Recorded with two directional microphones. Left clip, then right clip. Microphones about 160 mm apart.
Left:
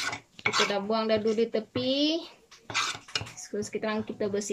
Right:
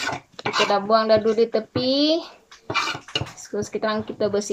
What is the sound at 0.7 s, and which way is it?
Speech, 20° left (ahead or behind).